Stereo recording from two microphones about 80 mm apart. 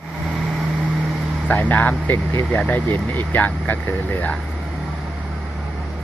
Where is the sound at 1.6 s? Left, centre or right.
Left.